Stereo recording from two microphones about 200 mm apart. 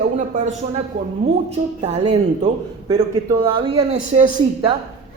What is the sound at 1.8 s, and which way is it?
Speech, 30° right (ahead or behind).